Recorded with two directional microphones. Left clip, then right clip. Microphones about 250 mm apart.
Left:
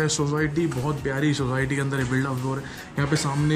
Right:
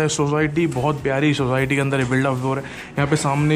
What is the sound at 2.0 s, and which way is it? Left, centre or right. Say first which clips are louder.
Music: right 6 dB; right.